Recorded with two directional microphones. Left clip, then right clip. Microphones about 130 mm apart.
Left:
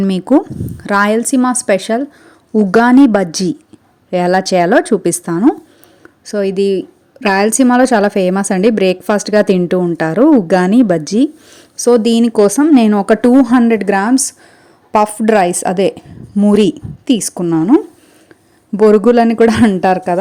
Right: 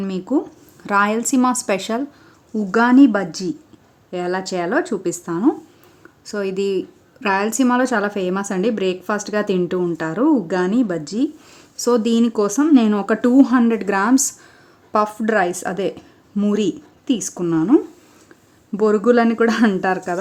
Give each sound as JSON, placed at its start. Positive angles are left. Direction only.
{"t": 0.1, "sound": "speech", "side_deg": 60}
{"t": 0.8, "sound": "a woman's voice", "side_deg": 35}
{"t": 2.5, "sound": "a woman's voice", "side_deg": 50}
{"t": 6.2, "sound": "a woman's voice", "side_deg": 30}
{"t": 11.5, "sound": "a woman's voice", "side_deg": 35}
{"t": 13.7, "sound": "a woman's voice", "side_deg": 30}
{"t": 14.9, "sound": "a woman's voice", "side_deg": 35}
{"t": 17.4, "sound": "a woman's voice", "side_deg": 25}
{"t": 18.8, "sound": "a woman's voice", "side_deg": 40}